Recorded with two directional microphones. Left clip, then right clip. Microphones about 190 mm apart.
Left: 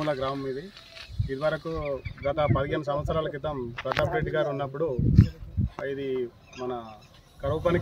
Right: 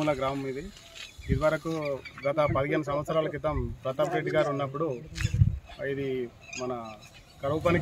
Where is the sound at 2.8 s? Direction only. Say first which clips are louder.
Even; 20° left (ahead or behind).